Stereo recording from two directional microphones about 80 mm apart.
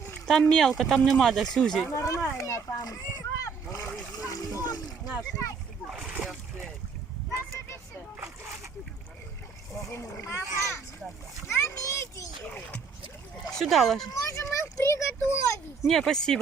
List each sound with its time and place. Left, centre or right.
0.3 s speech: centre
2.0 s a child's voice: left
2.4 s rowboat: left
4.6 s splash: left
5.4 s speech: left
5.9 s splash: centre
9.9 s a child's voice: left
13.5 s speech: centre
14.1 s a child's voice: left
15.9 s speech: centre